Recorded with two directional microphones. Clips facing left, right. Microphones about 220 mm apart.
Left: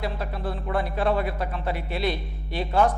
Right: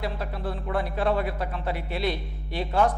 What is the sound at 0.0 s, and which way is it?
A man's voice, 15° left (ahead or behind).